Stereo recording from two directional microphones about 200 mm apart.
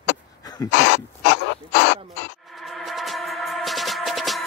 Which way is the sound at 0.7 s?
60° left (ahead or behind).